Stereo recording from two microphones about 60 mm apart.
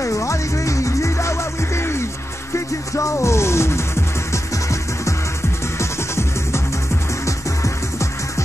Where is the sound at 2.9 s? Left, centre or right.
Left.